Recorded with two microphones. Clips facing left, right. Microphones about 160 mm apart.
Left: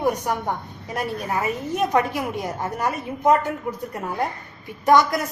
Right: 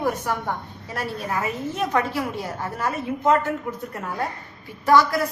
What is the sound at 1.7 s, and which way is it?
A woman's voice, 15° left (ahead or behind).